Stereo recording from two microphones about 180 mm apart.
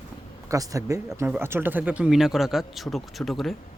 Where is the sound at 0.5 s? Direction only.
20° right (ahead or behind); by 3.5 s centre (ahead or behind).